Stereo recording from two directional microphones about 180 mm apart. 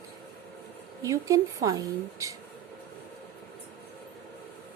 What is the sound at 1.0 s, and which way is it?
Speech, 20° right (ahead or behind).